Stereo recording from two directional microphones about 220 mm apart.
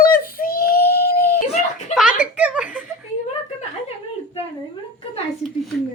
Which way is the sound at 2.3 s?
5° right (ahead or behind).